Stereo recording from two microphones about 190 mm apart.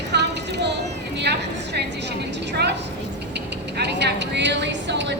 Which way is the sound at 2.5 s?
60° right (ahead or behind).